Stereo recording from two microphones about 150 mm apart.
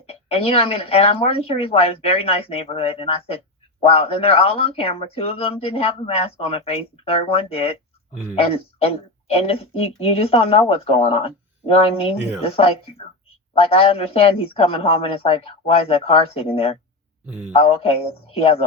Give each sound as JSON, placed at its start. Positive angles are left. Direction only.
{"t": 0.1, "sound": "a woman's voice", "side_deg": 40}
{"t": 8.1, "sound": "speech", "side_deg": -10}
{"t": 8.4, "sound": "a woman's voice", "side_deg": 40}